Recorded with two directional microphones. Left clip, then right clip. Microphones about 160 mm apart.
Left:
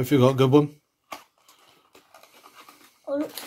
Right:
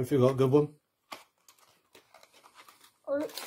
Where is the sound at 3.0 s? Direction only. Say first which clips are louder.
Left 4 dB; 15° right (ahead or behind).